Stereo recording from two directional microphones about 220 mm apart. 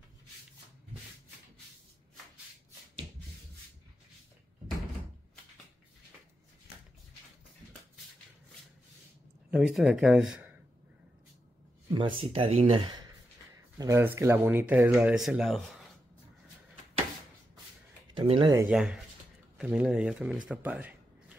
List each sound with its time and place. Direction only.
9.5 s speech: 5° right (ahead or behind)
11.9 s speech: 25° right (ahead or behind); by 15.9 s centre (ahead or behind)
18.1 s a sound: 25° right (ahead or behind)
18.5 s speech: 10° right (ahead or behind)